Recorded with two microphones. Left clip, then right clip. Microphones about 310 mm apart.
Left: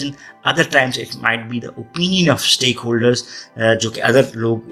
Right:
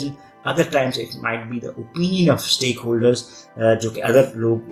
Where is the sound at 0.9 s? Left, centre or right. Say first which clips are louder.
Left 5 dB; left.